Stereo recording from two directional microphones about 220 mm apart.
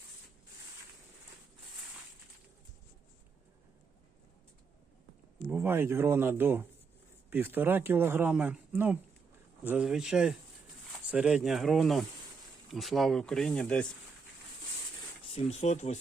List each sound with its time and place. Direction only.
5.5 s speech: 10° right (ahead or behind)
15.3 s speech: 30° left (ahead or behind)